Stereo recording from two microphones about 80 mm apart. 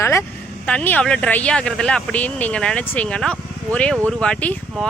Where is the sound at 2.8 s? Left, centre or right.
Left.